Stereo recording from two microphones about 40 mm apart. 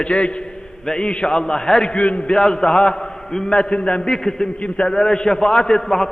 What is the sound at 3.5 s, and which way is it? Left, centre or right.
A man's voice, left.